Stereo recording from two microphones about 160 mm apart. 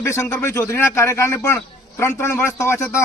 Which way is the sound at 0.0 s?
15° left (ahead or behind).